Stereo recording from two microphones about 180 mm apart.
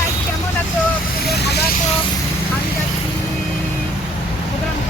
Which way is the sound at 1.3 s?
65° left (ahead or behind).